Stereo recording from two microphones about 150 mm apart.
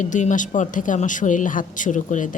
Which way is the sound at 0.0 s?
55° left (ahead or behind).